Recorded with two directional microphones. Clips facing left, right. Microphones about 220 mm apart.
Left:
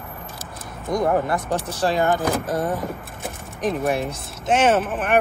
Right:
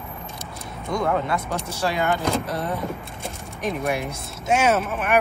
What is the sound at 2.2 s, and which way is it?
Speech, centre (ahead or behind).